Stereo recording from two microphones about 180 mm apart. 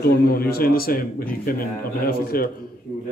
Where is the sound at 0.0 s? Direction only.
55° left (ahead or behind).